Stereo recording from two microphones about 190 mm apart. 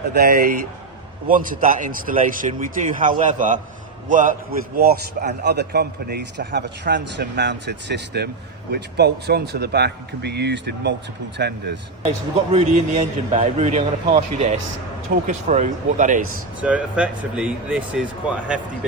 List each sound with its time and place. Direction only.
0.1 s a man's voice: 55° right (ahead or behind)
1.3 s a man's voice: 45° right (ahead or behind); by 11.8 s 65° right (ahead or behind)
12.0 s a man's voice: 35° right (ahead or behind)
16.6 s speech: 5° right (ahead or behind)